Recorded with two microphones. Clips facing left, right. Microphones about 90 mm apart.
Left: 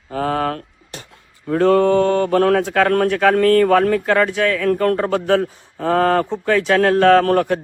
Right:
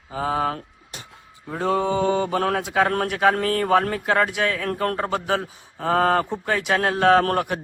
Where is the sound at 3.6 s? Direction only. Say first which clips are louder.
Left 5 dB; 30° right (ahead or behind).